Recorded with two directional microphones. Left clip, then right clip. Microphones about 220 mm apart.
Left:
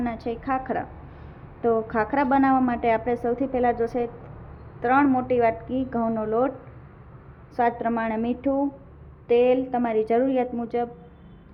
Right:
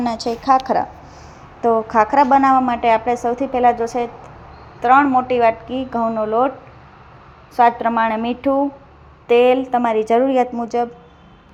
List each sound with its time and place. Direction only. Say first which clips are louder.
0.3 s a woman's voice: right 13 dB; 15° right (ahead or behind)
4.8 s a woman's voice: right 8 dB; centre (ahead or behind)
7.5 s a woman's voice: right 9 dB; 5° right (ahead or behind)